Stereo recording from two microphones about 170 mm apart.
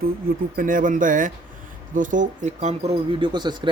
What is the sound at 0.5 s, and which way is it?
Speech, 50° right (ahead or behind).